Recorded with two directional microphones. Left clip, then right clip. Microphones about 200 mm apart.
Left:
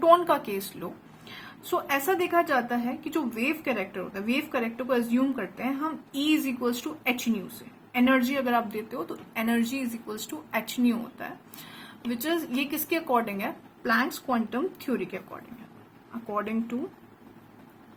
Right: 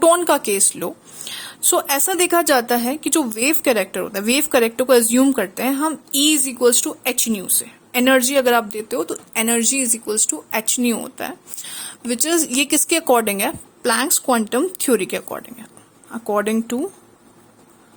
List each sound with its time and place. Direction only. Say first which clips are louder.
0.0 s a woman's voice: right 6 dB; 50° right (ahead or behind)